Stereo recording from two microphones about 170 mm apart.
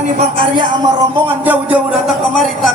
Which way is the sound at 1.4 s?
10° right (ahead or behind).